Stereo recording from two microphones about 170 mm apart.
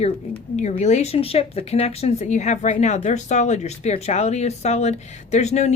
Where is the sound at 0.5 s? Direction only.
45° left (ahead or behind).